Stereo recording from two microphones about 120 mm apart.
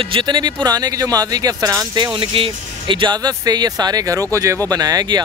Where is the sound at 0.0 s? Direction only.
45° right (ahead or behind).